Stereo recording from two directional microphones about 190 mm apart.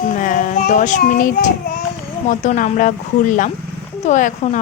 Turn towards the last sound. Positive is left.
turn(degrees=40)  # may be behind; listen again after turning